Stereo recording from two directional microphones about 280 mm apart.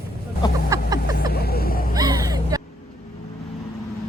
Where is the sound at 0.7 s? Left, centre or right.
Centre.